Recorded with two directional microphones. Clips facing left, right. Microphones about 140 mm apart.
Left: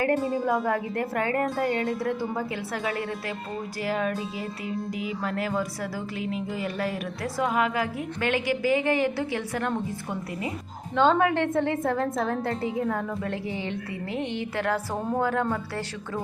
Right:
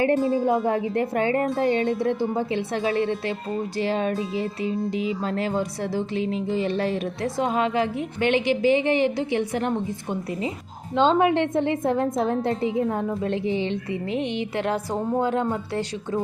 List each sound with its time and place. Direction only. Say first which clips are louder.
0.0 s speech: right 4 dB; 25° right (ahead or behind)